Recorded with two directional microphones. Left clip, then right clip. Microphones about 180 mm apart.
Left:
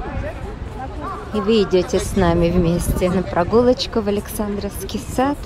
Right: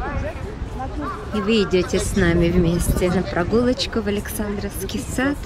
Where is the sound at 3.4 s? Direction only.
20° left (ahead or behind).